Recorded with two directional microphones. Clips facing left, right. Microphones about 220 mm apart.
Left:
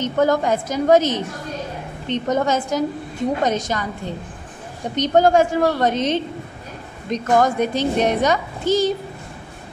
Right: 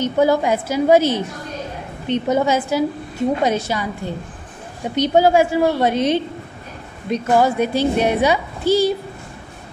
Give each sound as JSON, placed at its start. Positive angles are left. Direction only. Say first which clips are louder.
{"t": 0.0, "sound": "a woman's voice", "louder": "right 2 dB", "side_deg": -10}
{"t": 4.9, "sound": "a woman's voice", "louder": "right 1 dB", "side_deg": -10}